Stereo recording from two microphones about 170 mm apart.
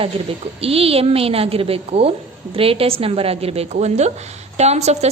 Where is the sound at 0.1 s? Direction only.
30° right (ahead or behind).